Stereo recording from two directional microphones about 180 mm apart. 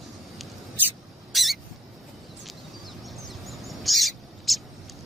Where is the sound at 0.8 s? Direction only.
10° right (ahead or behind).